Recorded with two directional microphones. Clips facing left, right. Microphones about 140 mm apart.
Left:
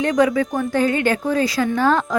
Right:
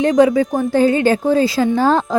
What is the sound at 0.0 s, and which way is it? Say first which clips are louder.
Speech: right 5 dB; 25° right (ahead or behind).